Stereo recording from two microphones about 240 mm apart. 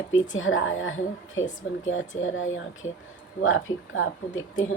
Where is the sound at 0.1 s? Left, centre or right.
Left.